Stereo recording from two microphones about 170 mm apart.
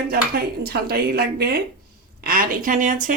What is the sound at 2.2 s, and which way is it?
Speech, 55° right (ahead or behind).